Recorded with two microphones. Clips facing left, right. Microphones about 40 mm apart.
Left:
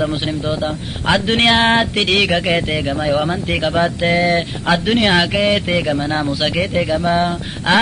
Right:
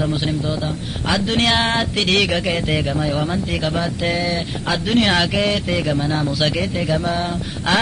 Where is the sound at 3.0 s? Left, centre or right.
Left.